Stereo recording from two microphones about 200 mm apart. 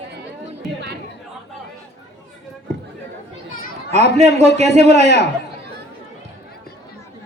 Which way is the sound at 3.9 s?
35° right (ahead or behind).